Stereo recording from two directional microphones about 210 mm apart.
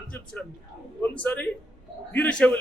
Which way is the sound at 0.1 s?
5° left (ahead or behind).